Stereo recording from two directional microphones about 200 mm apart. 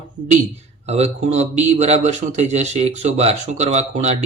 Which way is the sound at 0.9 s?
30° right (ahead or behind).